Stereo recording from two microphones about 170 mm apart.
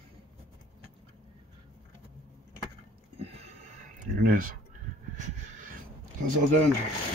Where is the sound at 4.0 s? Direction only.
55° right (ahead or behind).